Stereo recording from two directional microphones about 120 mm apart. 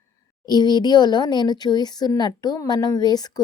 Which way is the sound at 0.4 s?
35° left (ahead or behind).